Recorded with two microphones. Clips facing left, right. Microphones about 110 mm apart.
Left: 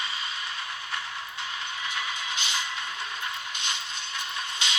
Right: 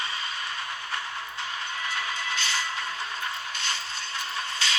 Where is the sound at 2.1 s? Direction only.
40° right (ahead or behind).